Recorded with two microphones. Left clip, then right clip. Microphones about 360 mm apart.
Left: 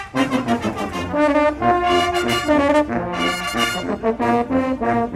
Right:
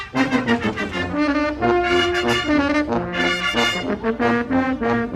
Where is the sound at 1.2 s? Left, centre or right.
Centre.